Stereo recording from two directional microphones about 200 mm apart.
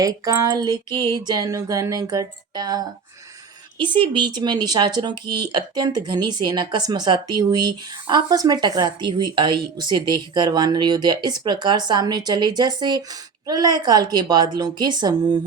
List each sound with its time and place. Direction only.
0.0 s speech: 15° right (ahead or behind)
3.9 s speech: 25° right (ahead or behind)